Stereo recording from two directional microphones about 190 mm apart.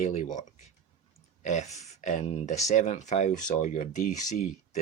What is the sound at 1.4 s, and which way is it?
Speech, 40° left (ahead or behind).